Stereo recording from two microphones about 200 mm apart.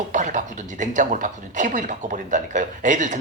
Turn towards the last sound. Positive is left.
turn(degrees=-40)  # may be behind; listen again after turning